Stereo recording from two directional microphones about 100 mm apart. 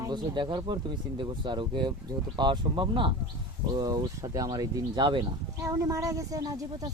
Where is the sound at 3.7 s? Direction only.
40° right (ahead or behind).